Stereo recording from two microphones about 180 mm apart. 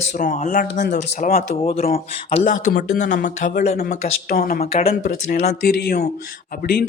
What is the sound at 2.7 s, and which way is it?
Speech, 70° left (ahead or behind).